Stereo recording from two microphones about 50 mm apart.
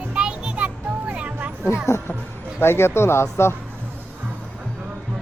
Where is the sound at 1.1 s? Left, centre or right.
Right.